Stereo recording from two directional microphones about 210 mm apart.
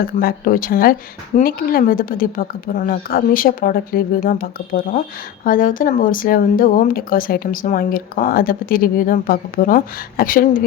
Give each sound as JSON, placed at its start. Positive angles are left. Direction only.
{"t": 0.2, "sound": "a woman's voice", "side_deg": 45}